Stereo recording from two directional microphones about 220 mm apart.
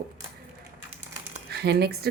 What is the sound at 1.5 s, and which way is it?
Speech, 50° right (ahead or behind).